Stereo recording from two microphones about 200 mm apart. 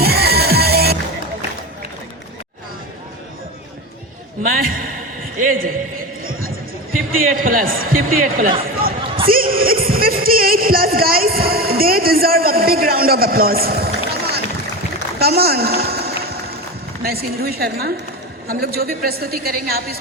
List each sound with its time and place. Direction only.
0.0 s music: 50° right (ahead or behind)
4.4 s a man's voice: 45° right (ahead or behind)
7.2 s speech: 45° right (ahead or behind)
15.2 s a sound: 50° right (ahead or behind)
17.0 s speech: 50° right (ahead or behind)